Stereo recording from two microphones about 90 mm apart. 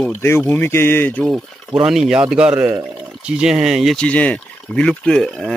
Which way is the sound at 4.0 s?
15° left (ahead or behind).